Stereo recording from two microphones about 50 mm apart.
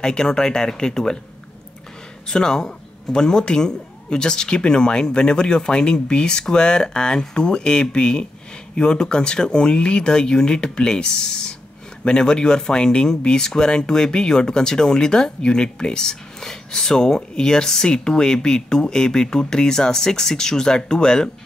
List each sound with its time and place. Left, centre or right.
0.0 s speech: centre
2.2 s speech: centre